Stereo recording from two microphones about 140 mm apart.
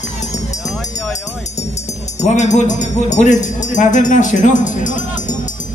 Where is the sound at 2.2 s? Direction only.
60° left (ahead or behind).